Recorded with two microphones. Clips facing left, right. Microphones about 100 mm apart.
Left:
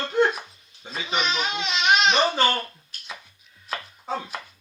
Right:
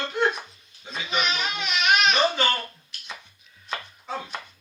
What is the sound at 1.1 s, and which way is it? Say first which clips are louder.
Speech: left 1 dB; 25° left (ahead or behind).